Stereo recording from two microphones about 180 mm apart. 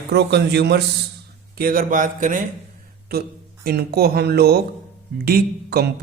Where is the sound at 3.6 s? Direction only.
60° right (ahead or behind).